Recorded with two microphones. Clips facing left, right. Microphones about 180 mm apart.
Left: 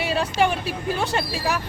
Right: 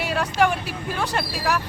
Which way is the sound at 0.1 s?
25° left (ahead or behind).